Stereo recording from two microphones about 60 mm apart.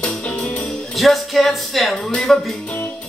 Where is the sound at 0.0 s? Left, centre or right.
Left.